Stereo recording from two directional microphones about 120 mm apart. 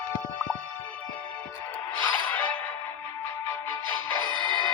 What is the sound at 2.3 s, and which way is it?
Music, 15° left (ahead or behind).